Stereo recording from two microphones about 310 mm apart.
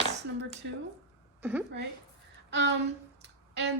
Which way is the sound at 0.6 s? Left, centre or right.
Right.